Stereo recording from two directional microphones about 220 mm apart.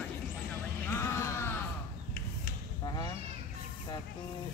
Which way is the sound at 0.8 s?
10° left (ahead or behind).